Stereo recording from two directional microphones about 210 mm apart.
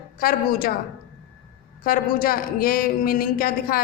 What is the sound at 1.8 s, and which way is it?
Speech, 45° left (ahead or behind).